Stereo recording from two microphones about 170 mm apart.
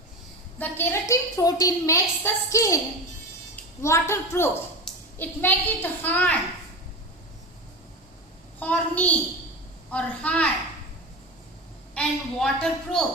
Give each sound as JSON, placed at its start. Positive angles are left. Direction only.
{"t": 0.6, "sound": "a woman's voice", "side_deg": 15}
{"t": 8.5, "sound": "a child's voice", "side_deg": 10}
{"t": 11.9, "sound": "a woman's voice", "side_deg": 5}